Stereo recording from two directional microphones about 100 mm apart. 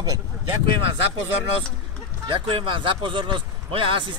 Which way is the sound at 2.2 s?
55° right (ahead or behind).